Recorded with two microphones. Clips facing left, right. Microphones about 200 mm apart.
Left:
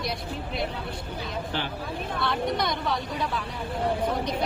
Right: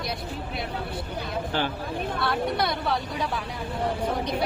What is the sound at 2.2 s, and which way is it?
Speech, 5° right (ahead or behind).